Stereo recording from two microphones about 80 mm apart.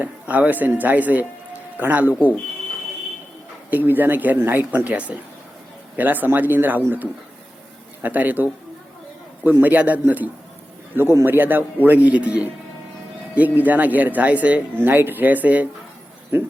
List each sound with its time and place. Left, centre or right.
0.0 s speech: right
3.7 s speech: right
10.9 s speech: right